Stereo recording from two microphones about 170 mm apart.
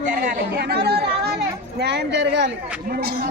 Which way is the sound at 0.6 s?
70° right (ahead or behind).